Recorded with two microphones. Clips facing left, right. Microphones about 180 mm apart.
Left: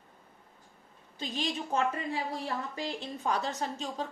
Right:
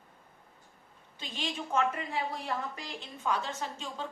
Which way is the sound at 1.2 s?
35° left (ahead or behind).